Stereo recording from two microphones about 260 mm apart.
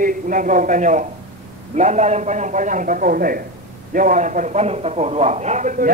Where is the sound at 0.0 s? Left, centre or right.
Right.